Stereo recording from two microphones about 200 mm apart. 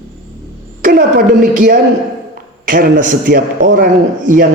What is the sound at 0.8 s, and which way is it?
A man's voice, 45° right (ahead or behind).